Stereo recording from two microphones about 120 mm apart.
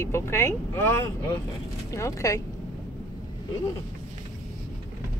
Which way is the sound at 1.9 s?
25° left (ahead or behind).